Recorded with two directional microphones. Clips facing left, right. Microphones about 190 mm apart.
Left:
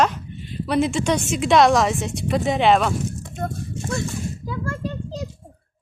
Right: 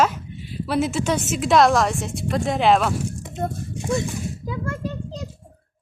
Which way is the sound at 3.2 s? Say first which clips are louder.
Right 1 dB; 15° right (ahead or behind).